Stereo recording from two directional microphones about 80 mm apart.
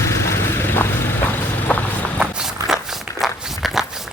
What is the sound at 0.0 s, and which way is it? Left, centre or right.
Vehicle, left.